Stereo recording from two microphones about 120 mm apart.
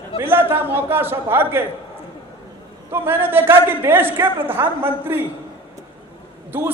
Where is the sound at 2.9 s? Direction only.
20° right (ahead or behind).